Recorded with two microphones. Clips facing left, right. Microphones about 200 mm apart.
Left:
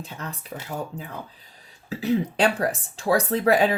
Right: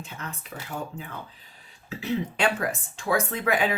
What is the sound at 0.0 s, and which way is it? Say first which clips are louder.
Speech: left 3 dB; 35° left (ahead or behind).